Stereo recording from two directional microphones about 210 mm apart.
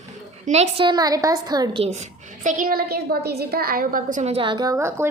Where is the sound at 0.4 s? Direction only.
30° right (ahead or behind).